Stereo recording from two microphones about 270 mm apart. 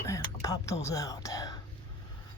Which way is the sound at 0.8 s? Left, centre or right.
Centre.